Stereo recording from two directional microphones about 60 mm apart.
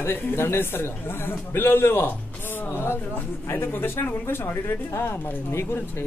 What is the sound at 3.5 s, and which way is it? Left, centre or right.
Speech, left.